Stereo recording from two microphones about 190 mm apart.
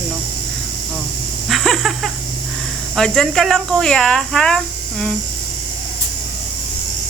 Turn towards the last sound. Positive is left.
turn(degrees=5)  # may be behind; listen again after turning